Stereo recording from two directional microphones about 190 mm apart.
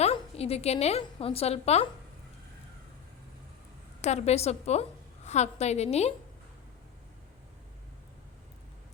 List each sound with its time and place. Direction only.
0.0 s a woman's voice: 30° left (ahead or behind)
4.0 s a woman's voice: 35° left (ahead or behind)